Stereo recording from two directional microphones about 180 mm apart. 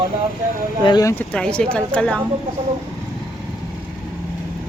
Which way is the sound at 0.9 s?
20° left (ahead or behind).